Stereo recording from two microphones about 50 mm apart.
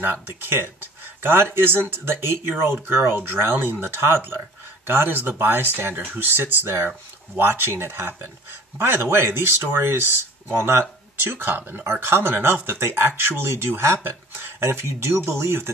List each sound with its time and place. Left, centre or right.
0.0 s speech: right
11.8 s speech: right